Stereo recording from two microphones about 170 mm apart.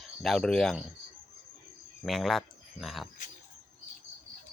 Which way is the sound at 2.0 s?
Centre (ahead or behind).